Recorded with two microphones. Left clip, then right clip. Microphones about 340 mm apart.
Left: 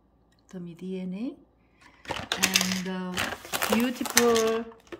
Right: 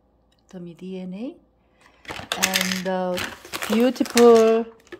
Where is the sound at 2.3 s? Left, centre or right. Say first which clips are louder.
Right 3 dB; centre.